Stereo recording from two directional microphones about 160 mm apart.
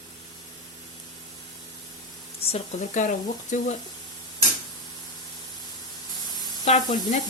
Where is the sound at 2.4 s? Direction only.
45° left (ahead or behind).